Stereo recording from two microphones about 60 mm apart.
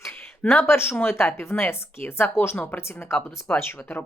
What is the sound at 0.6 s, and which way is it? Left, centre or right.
Speech, left.